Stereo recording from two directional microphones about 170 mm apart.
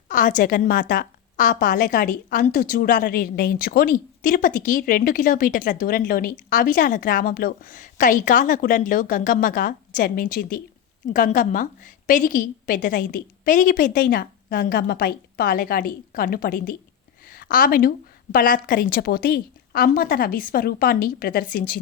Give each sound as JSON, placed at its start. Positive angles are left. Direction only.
{"t": 0.1, "sound": "a woman's voice", "side_deg": 50}